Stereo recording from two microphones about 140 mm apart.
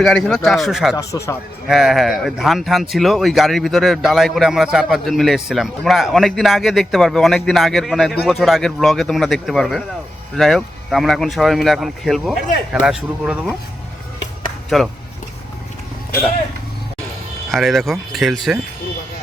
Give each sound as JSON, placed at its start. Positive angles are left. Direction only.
{"t": 0.0, "sound": "speech", "side_deg": 0}
{"t": 0.9, "sound": "speech", "side_deg": 25}
{"t": 1.6, "sound": "speech", "side_deg": 0}
{"t": 14.7, "sound": "speech", "side_deg": 0}
{"t": 17.5, "sound": "speech", "side_deg": 0}